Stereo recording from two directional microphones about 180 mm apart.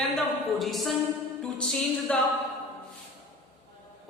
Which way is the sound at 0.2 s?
Centre (ahead or behind).